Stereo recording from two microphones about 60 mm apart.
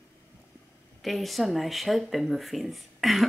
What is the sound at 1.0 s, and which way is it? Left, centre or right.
Speech, centre.